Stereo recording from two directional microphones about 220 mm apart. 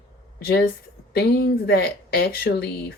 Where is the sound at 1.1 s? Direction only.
45° left (ahead or behind).